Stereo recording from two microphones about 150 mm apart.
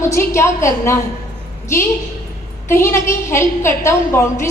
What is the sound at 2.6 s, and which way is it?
A woman's voice, 15° left (ahead or behind).